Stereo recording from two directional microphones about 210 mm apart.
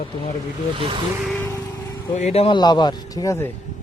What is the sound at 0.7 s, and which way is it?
Speech, 25° right (ahead or behind).